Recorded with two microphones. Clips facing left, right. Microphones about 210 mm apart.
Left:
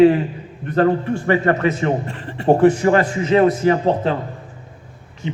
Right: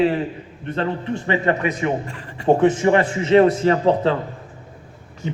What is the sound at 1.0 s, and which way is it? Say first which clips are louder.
A man's voice: left 3 dB; 20° right (ahead or behind).